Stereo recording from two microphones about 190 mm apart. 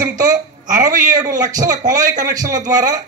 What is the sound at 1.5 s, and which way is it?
A man's voice, 20° right (ahead or behind).